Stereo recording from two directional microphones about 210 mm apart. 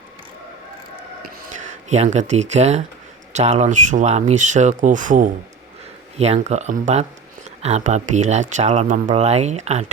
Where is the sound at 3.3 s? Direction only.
30° right (ahead or behind).